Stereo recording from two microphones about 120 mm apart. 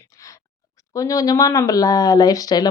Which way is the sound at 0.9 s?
30° left (ahead or behind).